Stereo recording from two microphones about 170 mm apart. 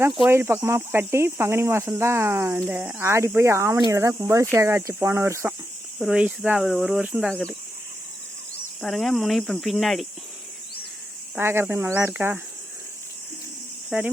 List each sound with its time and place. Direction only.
0.3 s speech: 15° right (ahead or behind)
6.0 s speech: 5° right (ahead or behind)
8.8 s speech: centre (ahead or behind)
11.3 s speech: 15° right (ahead or behind)
13.9 s speech: 5° right (ahead or behind)